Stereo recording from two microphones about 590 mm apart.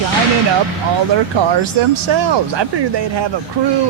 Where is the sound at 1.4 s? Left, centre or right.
Right.